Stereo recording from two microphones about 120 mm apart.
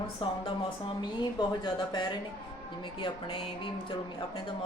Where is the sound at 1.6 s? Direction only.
40° left (ahead or behind).